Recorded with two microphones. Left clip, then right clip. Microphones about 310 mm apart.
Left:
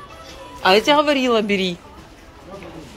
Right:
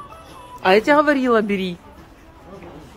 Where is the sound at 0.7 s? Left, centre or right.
Centre.